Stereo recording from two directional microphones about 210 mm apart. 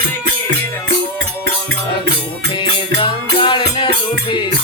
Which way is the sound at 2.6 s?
20° left (ahead or behind).